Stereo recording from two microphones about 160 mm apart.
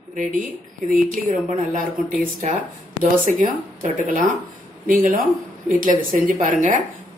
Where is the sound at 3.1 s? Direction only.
55° right (ahead or behind).